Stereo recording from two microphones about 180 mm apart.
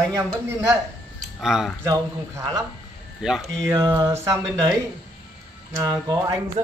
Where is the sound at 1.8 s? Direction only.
20° right (ahead or behind).